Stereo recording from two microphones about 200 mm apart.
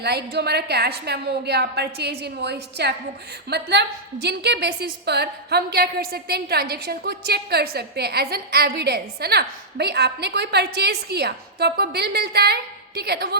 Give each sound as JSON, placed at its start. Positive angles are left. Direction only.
{"t": 0.0, "sound": "a woman's voice", "side_deg": -55}